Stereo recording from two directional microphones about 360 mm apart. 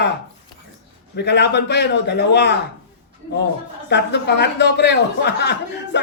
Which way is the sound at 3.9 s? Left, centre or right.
Left.